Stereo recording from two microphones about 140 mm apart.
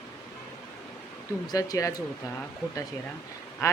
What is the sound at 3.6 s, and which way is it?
Speech, 20° left (ahead or behind).